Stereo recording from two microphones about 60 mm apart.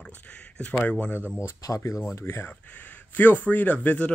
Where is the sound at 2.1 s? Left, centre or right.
Left.